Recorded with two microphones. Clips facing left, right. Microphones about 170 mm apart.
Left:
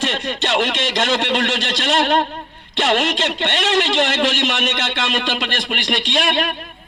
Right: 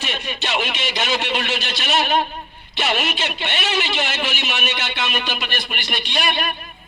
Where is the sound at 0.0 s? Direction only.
90° left.